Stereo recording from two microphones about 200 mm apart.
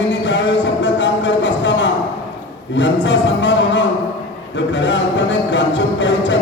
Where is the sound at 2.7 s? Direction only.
65° left (ahead or behind).